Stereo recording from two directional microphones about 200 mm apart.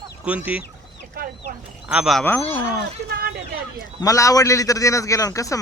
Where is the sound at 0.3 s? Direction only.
5° right (ahead or behind).